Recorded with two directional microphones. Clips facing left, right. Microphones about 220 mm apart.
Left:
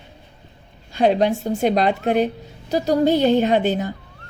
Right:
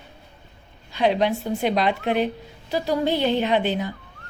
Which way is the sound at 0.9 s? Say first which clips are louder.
Left 4 dB; 45° left (ahead or behind).